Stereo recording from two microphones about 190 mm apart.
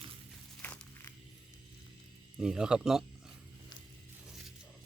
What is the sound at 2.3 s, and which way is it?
Speech, 5° right (ahead or behind).